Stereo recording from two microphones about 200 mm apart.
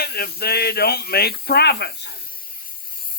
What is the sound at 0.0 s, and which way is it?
A man's voice, 50° left (ahead or behind).